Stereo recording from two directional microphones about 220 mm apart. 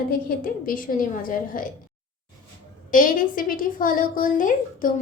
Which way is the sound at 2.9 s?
40° left (ahead or behind).